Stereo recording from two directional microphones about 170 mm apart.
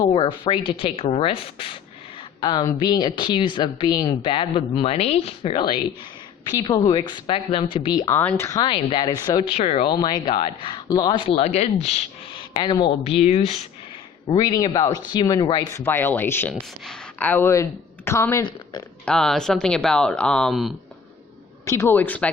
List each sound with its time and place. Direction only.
0.0 s a woman's voice: 30° left (ahead or behind)
8.1 s a woman's voice: 10° left (ahead or behind)
9.4 s speech: 35° left (ahead or behind)
9.9 s a woman's voice: 25° left (ahead or behind)
11.3 s speech: 40° left (ahead or behind)
12.5 s a woman's voice: 25° left (ahead or behind)
13.0 s speech: 35° left (ahead or behind)
14.3 s a woman's voice: 20° left (ahead or behind)
19.0 s speech: 5° left (ahead or behind)
21.6 s a man's voice: 20° left (ahead or behind)